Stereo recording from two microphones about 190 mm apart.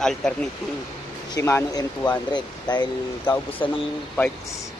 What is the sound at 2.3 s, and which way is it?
Speech, 20° left (ahead or behind).